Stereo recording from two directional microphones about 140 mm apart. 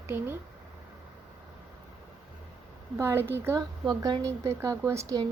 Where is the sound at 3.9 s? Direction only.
30° right (ahead or behind).